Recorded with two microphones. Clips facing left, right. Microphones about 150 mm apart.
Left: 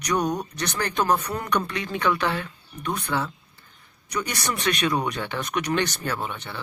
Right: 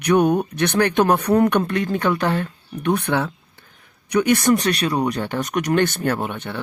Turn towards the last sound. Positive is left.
turn(degrees=-55)  # may be behind; listen again after turning